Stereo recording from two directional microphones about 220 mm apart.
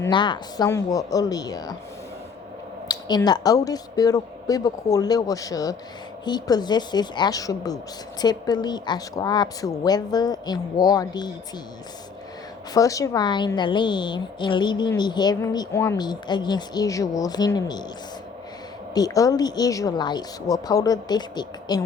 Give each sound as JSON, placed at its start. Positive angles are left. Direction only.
{"t": 0.0, "sound": "speech", "side_deg": 20}
{"t": 2.9, "sound": "a woman's voice", "side_deg": 20}
{"t": 12.7, "sound": "a woman's voice", "side_deg": 15}
{"t": 18.9, "sound": "speech", "side_deg": 15}